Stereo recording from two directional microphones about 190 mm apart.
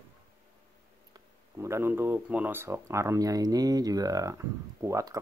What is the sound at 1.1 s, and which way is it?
Speech, 15° right (ahead or behind).